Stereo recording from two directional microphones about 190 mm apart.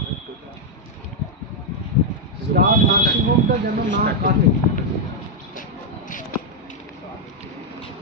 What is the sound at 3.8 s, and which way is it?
Speech, 65° right (ahead or behind).